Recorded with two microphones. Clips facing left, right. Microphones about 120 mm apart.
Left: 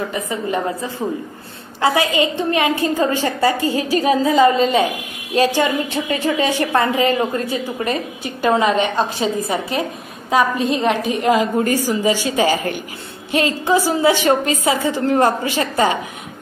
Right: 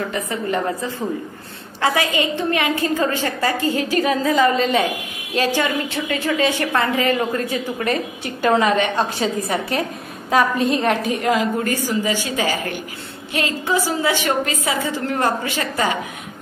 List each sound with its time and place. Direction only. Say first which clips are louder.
0.1 s a woman's voice: left 1 dB; 15° left (ahead or behind)
1.8 s a woman's voice: left 3 dB; 25° left (ahead or behind)